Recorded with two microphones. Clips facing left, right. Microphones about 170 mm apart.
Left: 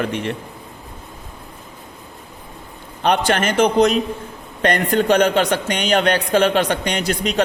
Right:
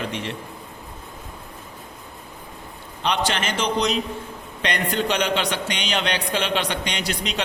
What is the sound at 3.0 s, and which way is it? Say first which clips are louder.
A man's voice: left 6 dB; 50° left (ahead or behind).